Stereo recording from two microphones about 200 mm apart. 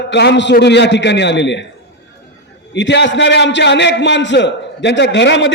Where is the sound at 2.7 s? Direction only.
60° left (ahead or behind).